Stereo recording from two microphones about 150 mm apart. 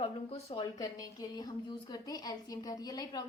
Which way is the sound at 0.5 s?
25° left (ahead or behind).